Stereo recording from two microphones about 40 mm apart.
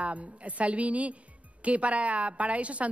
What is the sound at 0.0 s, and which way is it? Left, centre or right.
A woman's voice, right.